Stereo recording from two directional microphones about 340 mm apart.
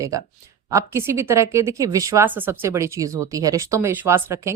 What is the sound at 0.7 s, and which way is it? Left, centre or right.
A woman's voice, centre.